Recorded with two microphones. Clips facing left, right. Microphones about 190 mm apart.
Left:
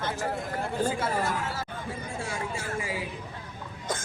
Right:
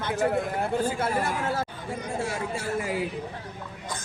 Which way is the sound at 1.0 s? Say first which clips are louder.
Right 2 dB; 55° right (ahead or behind).